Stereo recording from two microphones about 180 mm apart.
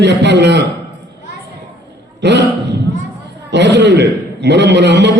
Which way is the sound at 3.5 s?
75° right (ahead or behind).